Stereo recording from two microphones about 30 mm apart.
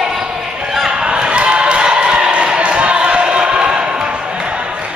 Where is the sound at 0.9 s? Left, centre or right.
Right.